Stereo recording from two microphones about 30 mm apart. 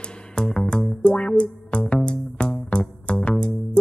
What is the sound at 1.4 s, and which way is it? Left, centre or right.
Music, left.